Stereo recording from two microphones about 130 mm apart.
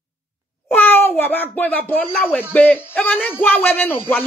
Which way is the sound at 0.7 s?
15° left (ahead or behind).